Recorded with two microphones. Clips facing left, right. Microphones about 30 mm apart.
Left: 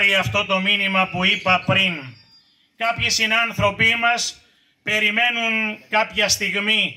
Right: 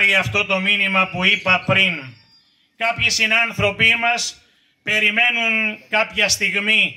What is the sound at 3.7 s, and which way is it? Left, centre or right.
Speech, right.